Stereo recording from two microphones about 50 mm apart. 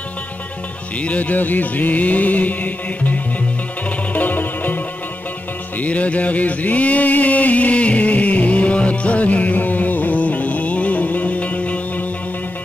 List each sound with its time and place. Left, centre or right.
1.0 s music: left
5.8 s music: left